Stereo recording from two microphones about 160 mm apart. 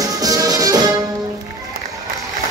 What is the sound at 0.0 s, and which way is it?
Music, 20° right (ahead or behind).